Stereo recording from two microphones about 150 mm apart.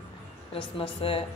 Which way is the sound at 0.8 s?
35° left (ahead or behind).